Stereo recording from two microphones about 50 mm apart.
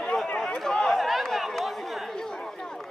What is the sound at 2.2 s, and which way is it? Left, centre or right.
Chatter, centre.